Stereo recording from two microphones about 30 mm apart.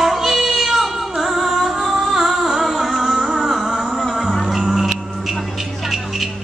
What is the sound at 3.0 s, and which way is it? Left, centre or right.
Music, centre.